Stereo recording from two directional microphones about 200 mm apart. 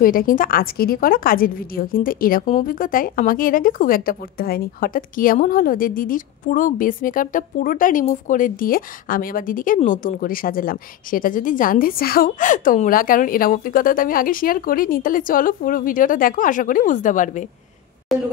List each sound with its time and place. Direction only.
0.0 s a woman's voice: 45° left (ahead or behind)
18.1 s speech: centre (ahead or behind)